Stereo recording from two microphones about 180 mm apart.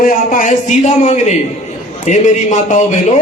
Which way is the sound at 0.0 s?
45° left (ahead or behind).